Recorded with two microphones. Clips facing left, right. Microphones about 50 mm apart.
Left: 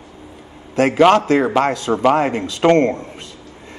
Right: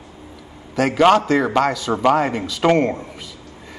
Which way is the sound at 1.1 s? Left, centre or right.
Left.